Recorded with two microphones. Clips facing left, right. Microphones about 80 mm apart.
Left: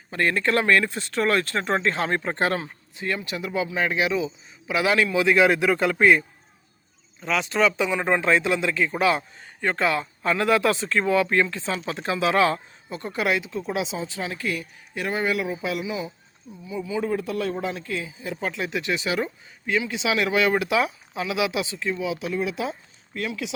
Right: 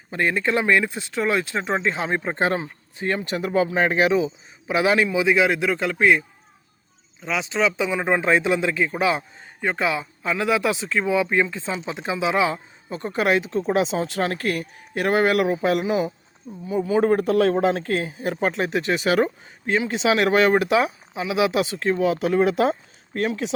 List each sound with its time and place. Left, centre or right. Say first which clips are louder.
0.1 s speech: right 1 dB; centre
3.0 s speech: right 4 dB; right
4.7 s speech: right 2 dB; right
5.4 s speech: left 1 dB; centre
10.2 s speech: left 1 dB; centre
12.9 s speech: right 4 dB; right
13.9 s speech: right 7 dB; right
17.0 s speech: right 8 dB; right
18.3 s speech: right 5 dB; right
21.7 s speech: right 6 dB; right